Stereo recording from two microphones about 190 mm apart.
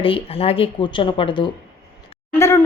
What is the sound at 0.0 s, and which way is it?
Speech, 30° left (ahead or behind).